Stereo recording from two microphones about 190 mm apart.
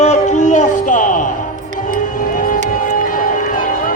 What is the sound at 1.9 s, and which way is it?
Music, 45° left (ahead or behind).